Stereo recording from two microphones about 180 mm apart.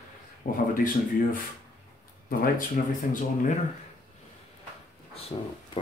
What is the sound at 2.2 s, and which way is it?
Speech, 55° left (ahead or behind).